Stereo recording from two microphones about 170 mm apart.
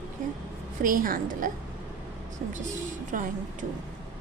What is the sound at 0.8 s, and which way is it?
Speech, 55° right (ahead or behind).